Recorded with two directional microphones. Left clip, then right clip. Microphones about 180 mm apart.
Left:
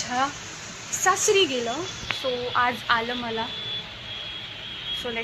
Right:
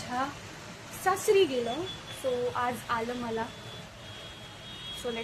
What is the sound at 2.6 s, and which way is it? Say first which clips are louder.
Speech: left 8 dB; centre (ahead or behind).